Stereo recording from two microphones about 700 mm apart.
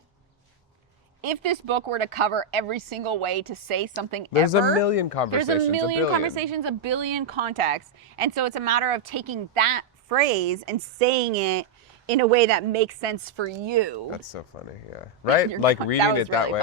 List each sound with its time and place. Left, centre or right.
1.2 s speech: right
4.8 s speech: left
6.4 s speech: right
14.5 s speech: left